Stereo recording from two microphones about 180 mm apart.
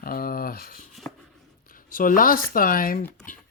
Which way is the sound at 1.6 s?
50° left (ahead or behind).